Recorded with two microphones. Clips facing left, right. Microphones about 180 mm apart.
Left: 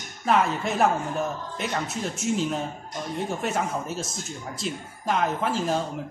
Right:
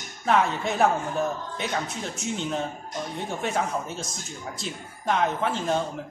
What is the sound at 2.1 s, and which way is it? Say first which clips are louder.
Speech: left 3 dB; 5° left (ahead or behind).